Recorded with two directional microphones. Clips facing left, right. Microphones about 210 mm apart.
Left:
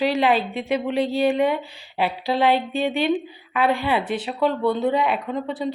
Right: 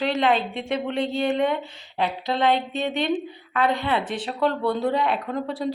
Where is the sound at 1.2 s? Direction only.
5° left (ahead or behind).